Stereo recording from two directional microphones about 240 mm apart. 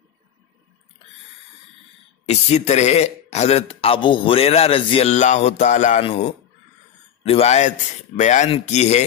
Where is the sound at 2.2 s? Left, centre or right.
Left.